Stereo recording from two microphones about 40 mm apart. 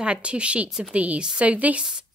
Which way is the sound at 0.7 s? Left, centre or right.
Centre.